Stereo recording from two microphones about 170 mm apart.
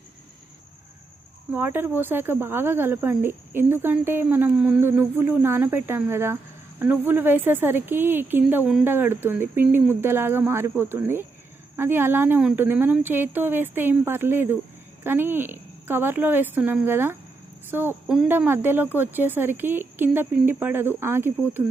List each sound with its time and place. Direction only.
1.5 s speech: 10° right (ahead or behind)